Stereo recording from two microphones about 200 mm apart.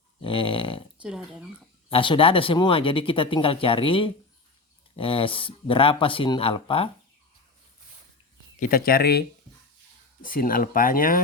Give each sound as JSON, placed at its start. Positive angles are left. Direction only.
{"t": 0.2, "sound": "a sound", "side_deg": 25}
{"t": 1.0, "sound": "speech", "side_deg": -5}
{"t": 1.9, "sound": "speech", "side_deg": 25}
{"t": 8.5, "sound": "speech", "side_deg": 45}
{"t": 10.2, "sound": "speech", "side_deg": 45}